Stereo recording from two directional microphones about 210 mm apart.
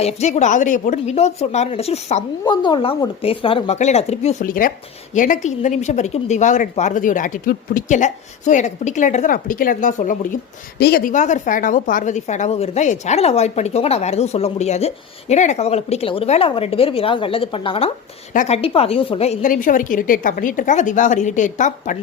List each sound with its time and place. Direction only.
0.0 s a woman's voice: 30° left (ahead or behind)